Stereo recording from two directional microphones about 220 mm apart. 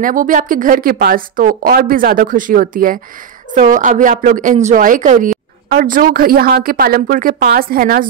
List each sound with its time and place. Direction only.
0.0 s speech: 40° right (ahead or behind)